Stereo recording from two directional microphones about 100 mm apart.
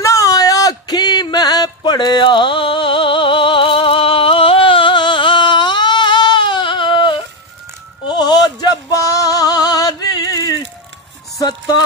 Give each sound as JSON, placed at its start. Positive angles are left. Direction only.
{"t": 0.0, "sound": "a sound", "side_deg": 35}
{"t": 8.1, "sound": "male singing", "side_deg": 45}
{"t": 11.3, "sound": "music", "side_deg": 40}